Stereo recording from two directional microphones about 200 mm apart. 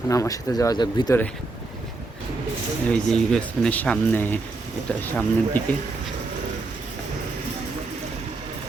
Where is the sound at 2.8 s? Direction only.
5° left (ahead or behind).